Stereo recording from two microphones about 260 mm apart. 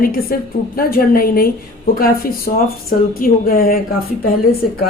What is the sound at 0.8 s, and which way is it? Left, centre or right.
Speech, left.